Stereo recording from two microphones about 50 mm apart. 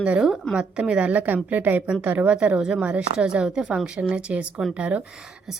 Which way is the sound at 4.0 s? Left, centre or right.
Right.